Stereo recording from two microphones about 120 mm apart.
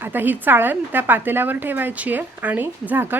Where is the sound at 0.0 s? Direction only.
15° right (ahead or behind).